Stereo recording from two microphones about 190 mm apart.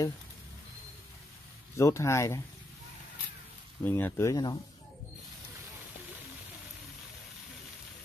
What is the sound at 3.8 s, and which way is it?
Speech, 10° left (ahead or behind).